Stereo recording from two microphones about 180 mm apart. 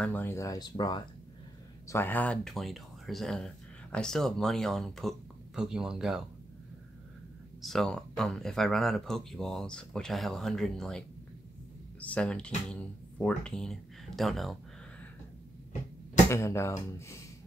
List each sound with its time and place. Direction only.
0.0 s speech: 10° left (ahead or behind)
1.9 s speech: 10° left (ahead or behind)
7.6 s speech: centre (ahead or behind)
16.3 s speech: 15° left (ahead or behind)